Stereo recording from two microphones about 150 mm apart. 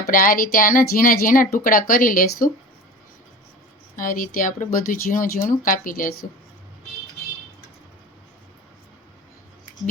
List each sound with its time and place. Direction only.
0.1 s speech: 70° left (ahead or behind)
3.9 s speech: 65° left (ahead or behind)